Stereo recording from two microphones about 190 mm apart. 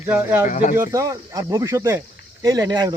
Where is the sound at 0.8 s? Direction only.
15° right (ahead or behind).